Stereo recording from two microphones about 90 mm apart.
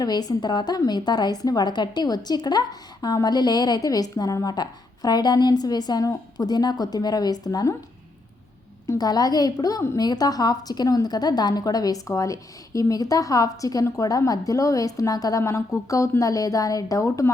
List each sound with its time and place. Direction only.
0.0 s a woman's voice: 45° left (ahead or behind)
8.9 s a woman's voice: 45° left (ahead or behind)